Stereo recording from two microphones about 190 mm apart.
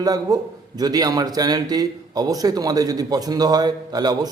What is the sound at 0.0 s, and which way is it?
A man's voice, 20° right (ahead or behind).